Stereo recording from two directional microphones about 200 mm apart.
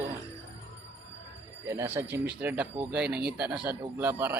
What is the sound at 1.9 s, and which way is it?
Speech, 10° right (ahead or behind).